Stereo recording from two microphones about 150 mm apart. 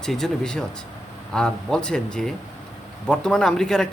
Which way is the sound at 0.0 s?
5° left (ahead or behind).